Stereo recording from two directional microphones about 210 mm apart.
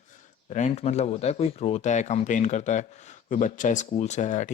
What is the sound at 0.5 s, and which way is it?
Speech, 30° left (ahead or behind).